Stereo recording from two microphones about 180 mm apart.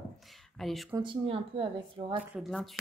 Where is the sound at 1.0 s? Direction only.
30° right (ahead or behind).